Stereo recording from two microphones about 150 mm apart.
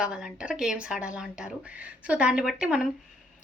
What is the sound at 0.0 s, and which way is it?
Speech, 5° right (ahead or behind).